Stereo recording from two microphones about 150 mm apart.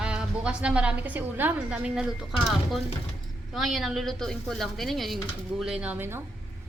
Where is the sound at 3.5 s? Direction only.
Centre (ahead or behind).